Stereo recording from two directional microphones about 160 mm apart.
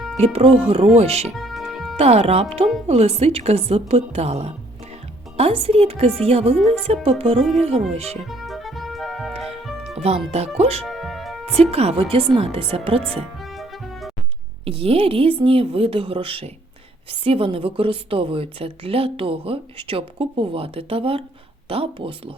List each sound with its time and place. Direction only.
0.3 s a woman's voice: 35° right (ahead or behind)
1.4 s music: centre (ahead or behind)
2.0 s a woman's voice: 40° right (ahead or behind)
8.3 s music: centre (ahead or behind)
10.3 s a woman's voice: 40° right (ahead or behind)
10.8 s music: centre (ahead or behind)
11.4 s a woman's voice: 40° right (ahead or behind)
13.4 s music: centre (ahead or behind)
14.6 s a woman's voice: 35° right (ahead or behind)